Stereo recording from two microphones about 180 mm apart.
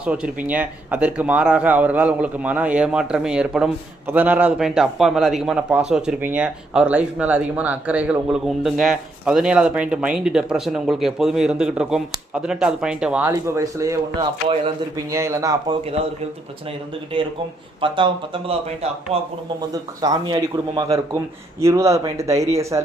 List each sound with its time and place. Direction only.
0.0 s a man's voice: 5° right (ahead or behind)
13.3 s a man's voice: 15° right (ahead or behind)
14.2 s speech: 30° right (ahead or behind)
14.9 s a man's voice: 15° right (ahead or behind)
17.1 s speech: 30° right (ahead or behind)
19.7 s a man's voice: 20° right (ahead or behind)